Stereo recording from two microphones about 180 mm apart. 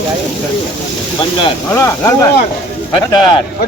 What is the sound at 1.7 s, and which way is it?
Speech, 15° left (ahead or behind).